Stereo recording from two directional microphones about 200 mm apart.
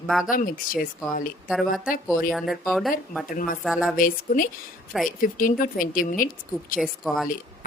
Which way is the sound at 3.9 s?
45° left (ahead or behind).